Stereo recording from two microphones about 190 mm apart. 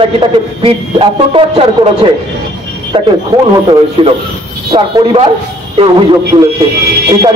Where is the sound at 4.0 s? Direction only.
30° right (ahead or behind).